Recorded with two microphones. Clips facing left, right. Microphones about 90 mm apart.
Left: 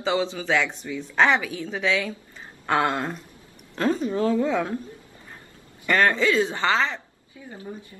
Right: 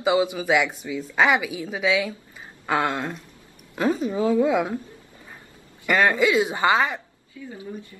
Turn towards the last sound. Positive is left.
turn(degrees=25)  # may be behind; listen again after turning